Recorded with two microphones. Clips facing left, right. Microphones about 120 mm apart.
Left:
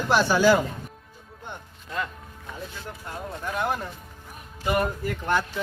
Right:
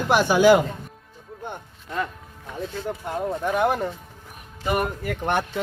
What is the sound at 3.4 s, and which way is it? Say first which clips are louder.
Speech: right 5 dB; 60° right (ahead or behind).